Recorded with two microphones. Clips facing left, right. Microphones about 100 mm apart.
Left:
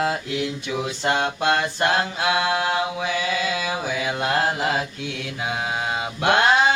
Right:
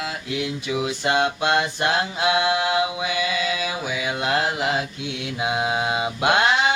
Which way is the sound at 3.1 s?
45° left (ahead or behind).